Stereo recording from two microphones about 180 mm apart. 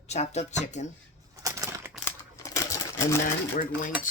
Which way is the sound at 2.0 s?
15° left (ahead or behind).